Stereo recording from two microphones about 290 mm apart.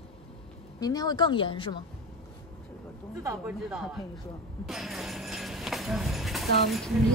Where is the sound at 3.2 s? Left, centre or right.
Centre.